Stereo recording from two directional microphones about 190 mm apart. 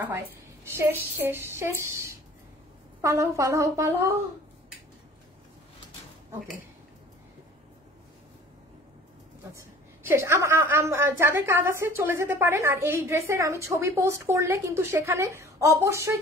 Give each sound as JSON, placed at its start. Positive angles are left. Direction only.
{"t": 0.7, "sound": "a woman's voice", "side_deg": -10}
{"t": 9.5, "sound": "a woman's voice", "side_deg": -15}